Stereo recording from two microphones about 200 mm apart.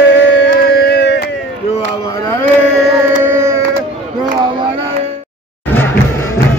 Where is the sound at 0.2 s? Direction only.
65° left (ahead or behind).